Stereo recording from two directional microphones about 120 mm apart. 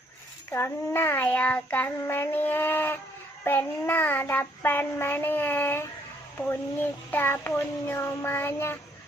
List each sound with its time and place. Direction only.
0.5 s child singing: 20° left (ahead or behind)
6.3 s speech: 20° left (ahead or behind)
7.1 s child singing: 15° left (ahead or behind)